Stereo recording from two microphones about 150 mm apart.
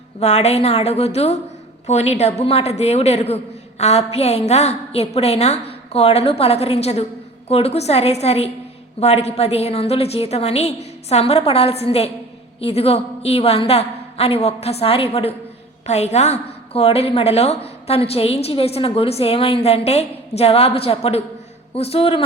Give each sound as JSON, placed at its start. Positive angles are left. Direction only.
{"t": 0.2, "sound": "a woman's voice", "side_deg": 45}